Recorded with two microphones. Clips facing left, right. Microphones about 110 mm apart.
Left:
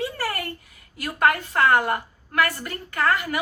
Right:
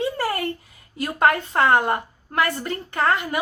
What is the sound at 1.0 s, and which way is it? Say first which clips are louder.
A woman's voice: right 2 dB; 25° right (ahead or behind).